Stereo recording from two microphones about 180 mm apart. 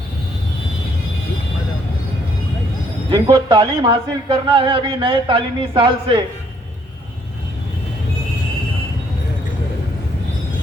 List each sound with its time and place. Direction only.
3.1 s speech: 25° right (ahead or behind)